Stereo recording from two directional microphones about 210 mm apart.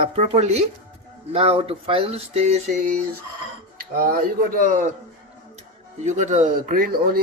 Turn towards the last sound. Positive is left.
turn(degrees=-45)  # may be behind; listen again after turning